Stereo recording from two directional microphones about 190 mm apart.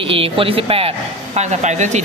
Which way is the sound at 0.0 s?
30° right (ahead or behind).